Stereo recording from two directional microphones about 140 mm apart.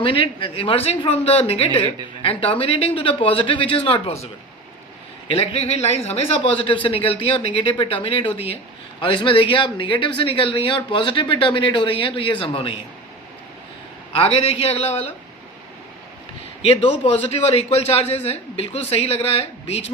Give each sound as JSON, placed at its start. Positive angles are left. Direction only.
{"t": 0.0, "sound": "speech", "side_deg": 40}
{"t": 5.3, "sound": "speech", "side_deg": 45}
{"t": 14.1, "sound": "speech", "side_deg": 45}
{"t": 16.6, "sound": "speech", "side_deg": 45}